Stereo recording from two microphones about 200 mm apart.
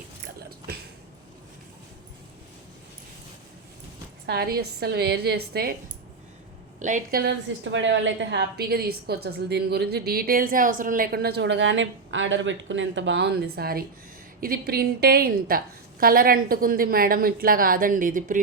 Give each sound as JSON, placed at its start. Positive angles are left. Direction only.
{"t": 4.3, "sound": "a woman's voice", "side_deg": -50}
{"t": 6.7, "sound": "a woman's voice", "side_deg": -40}
{"t": 7.2, "sound": "a woman's voice", "side_deg": -65}